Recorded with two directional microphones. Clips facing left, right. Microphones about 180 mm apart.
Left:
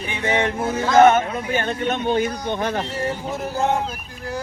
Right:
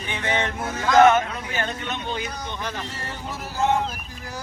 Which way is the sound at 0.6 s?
25° left (ahead or behind).